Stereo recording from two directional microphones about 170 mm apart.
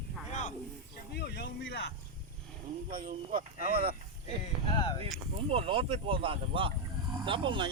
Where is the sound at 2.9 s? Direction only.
50° right (ahead or behind).